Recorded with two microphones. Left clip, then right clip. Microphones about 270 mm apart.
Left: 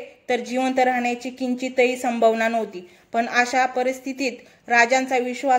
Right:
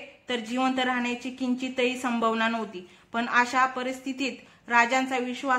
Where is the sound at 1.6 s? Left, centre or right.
Right.